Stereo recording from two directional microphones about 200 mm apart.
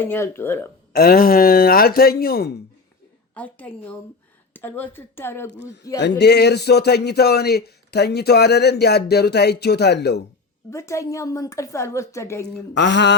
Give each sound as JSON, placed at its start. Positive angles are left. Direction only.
{"t": 0.0, "sound": "a woman's voice", "side_deg": 10}
{"t": 0.9, "sound": "speech", "side_deg": 50}
{"t": 3.3, "sound": "a woman's voice", "side_deg": 10}
{"t": 6.0, "sound": "speech", "side_deg": 60}
{"t": 10.7, "sound": "a woman's voice", "side_deg": 15}
{"t": 12.5, "sound": "speech", "side_deg": 60}